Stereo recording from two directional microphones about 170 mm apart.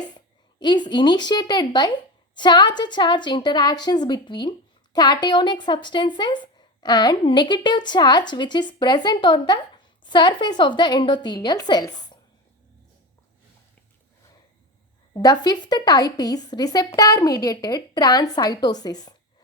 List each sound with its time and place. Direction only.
0.6 s a woman's voice: 25° left (ahead or behind)
15.1 s speech: 25° left (ahead or behind)